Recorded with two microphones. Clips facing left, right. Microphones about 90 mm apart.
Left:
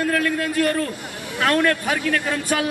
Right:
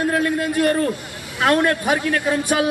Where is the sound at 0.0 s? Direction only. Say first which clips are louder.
Right 2 dB; 20° right (ahead or behind).